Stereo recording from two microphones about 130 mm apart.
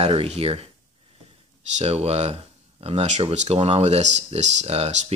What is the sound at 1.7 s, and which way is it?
Speech, 50° right (ahead or behind).